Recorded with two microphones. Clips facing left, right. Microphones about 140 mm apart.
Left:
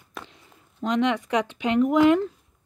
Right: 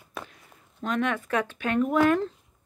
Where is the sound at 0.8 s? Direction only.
20° left (ahead or behind).